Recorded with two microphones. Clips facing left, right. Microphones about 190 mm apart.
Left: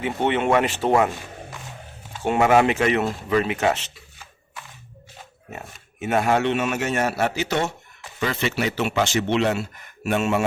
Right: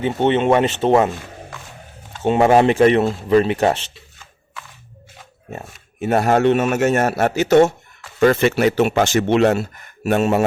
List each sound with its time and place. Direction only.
0.0 s speech: 25° right (ahead or behind)
2.2 s speech: 25° right (ahead or behind)
5.5 s a man's voice: 35° right (ahead or behind)